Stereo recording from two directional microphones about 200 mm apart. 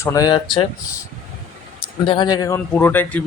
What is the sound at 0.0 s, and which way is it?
Speech, 15° left (ahead or behind).